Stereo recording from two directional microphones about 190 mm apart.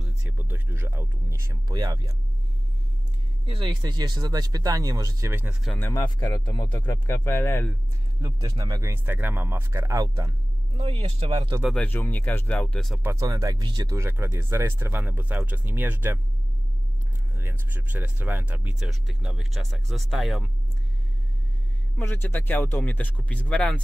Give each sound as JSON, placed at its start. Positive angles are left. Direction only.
{"t": 0.0, "sound": "speech", "side_deg": -10}
{"t": 3.4, "sound": "speech", "side_deg": -30}
{"t": 5.8, "sound": "speech", "side_deg": 15}
{"t": 8.2, "sound": "speech", "side_deg": -20}
{"t": 11.6, "sound": "speech", "side_deg": 5}
{"t": 13.0, "sound": "speech", "side_deg": -15}
{"t": 17.4, "sound": "speech", "side_deg": -10}
{"t": 21.9, "sound": "speech", "side_deg": 10}